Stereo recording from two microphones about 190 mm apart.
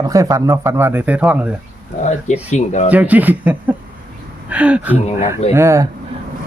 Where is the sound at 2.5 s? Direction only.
35° left (ahead or behind).